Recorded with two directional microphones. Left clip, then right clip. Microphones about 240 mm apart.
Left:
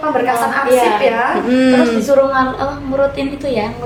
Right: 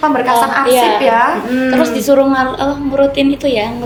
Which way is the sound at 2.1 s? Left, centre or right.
Right.